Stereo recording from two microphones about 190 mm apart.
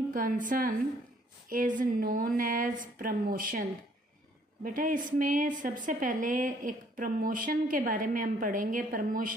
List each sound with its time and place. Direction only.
0.1 s a woman's voice: 45° right (ahead or behind)
4.6 s a woman's voice: 45° right (ahead or behind)